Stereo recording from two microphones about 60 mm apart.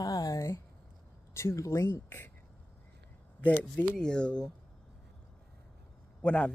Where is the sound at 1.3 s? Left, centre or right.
Left.